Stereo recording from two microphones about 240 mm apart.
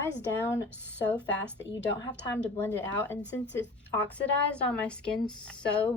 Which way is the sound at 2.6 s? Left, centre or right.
Centre.